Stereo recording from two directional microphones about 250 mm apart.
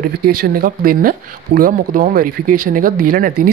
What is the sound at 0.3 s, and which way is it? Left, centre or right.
Speech, right.